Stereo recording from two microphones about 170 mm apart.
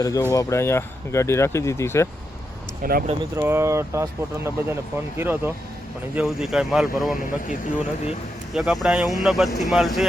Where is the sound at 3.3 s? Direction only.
15° right (ahead or behind).